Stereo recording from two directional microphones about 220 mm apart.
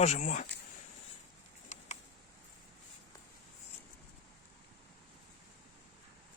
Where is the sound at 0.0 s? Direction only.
35° left (ahead or behind).